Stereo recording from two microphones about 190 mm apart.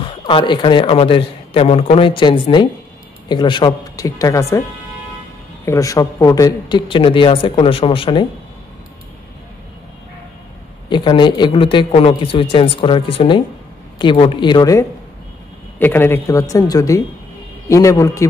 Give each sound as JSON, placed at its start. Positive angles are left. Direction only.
{"t": 0.0, "sound": "a man's voice", "side_deg": 25}
{"t": 5.7, "sound": "a man's voice", "side_deg": 15}
{"t": 10.9, "sound": "a man's voice", "side_deg": 25}